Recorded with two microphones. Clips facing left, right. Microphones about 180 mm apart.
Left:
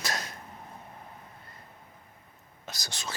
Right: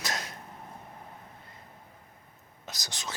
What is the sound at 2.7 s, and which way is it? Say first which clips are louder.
Speech: left 1 dB; 20° right (ahead or behind).